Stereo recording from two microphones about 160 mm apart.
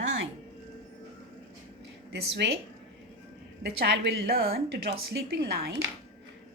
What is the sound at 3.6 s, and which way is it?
A woman's voice, 90° right.